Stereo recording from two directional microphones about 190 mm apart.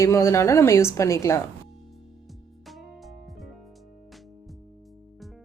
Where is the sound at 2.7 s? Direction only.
Centre (ahead or behind).